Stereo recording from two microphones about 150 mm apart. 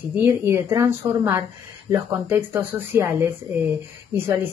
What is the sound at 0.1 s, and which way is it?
Speech, 15° right (ahead or behind).